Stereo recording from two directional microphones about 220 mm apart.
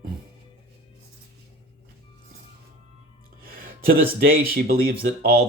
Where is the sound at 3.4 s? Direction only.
40° right (ahead or behind).